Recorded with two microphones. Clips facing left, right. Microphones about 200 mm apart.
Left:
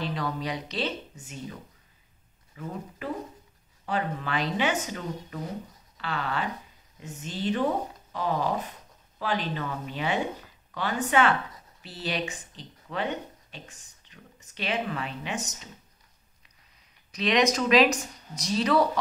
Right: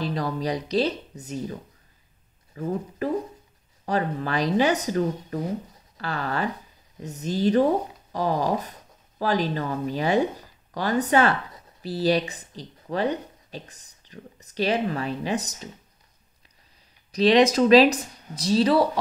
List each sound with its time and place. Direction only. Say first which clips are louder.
0.0 s speech: right 4 dB; 35° right (ahead or behind)
2.6 s speech: right 9 dB; 40° right (ahead or behind)
17.1 s speech: right 6 dB; 30° right (ahead or behind)